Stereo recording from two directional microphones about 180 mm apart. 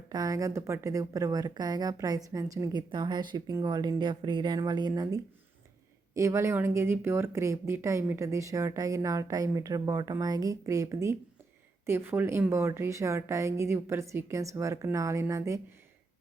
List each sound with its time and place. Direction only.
0.1 s a woman's voice: 20° right (ahead or behind)